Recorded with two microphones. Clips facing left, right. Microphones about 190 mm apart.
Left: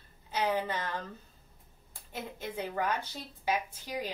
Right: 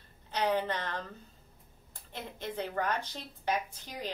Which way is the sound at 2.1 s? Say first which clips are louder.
Even; 10° left (ahead or behind).